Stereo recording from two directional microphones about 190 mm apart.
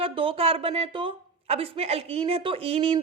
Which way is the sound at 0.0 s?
25° right (ahead or behind).